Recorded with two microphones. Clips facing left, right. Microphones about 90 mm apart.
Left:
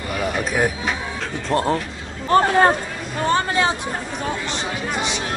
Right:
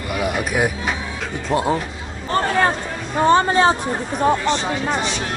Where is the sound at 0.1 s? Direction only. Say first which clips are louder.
Right 1 dB; 10° right (ahead or behind).